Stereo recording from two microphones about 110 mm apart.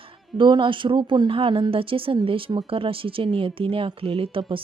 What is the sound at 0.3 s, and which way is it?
Speech, 45° right (ahead or behind).